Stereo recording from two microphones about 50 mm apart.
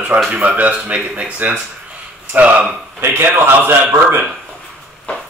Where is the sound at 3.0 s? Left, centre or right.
Right.